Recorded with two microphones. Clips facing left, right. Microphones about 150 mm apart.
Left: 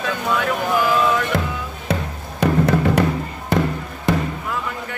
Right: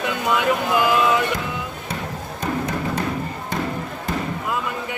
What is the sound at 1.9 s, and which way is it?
Music, 70° left (ahead or behind).